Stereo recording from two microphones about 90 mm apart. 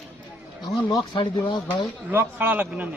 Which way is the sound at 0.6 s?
55° left (ahead or behind).